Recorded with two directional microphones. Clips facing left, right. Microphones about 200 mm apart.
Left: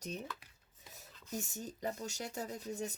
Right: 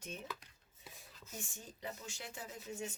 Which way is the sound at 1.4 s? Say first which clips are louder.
Left 6 dB; 40° left (ahead or behind).